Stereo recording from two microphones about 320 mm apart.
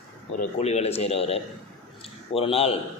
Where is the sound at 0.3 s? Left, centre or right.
Left.